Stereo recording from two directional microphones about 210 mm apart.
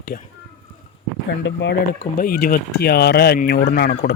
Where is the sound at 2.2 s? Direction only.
45° left (ahead or behind).